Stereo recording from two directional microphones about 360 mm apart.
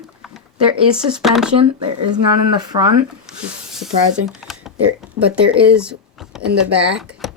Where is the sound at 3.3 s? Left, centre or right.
Centre.